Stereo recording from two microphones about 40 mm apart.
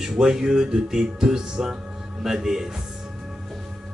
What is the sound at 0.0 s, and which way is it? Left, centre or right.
A man's voice, centre.